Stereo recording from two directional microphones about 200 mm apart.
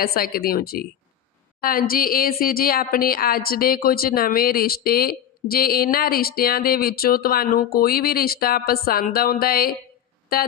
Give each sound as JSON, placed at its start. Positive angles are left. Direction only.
{"t": 0.0, "sound": "a woman's voice", "side_deg": 45}